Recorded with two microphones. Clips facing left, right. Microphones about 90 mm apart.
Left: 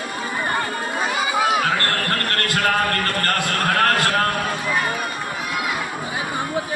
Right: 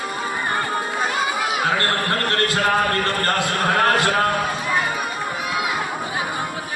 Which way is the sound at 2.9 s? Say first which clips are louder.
Right 1 dB; 20° right (ahead or behind).